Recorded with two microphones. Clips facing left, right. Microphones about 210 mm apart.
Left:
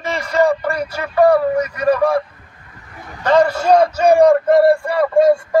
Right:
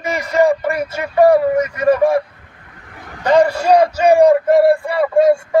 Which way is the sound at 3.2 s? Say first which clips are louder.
Right 1 dB; 15° right (ahead or behind).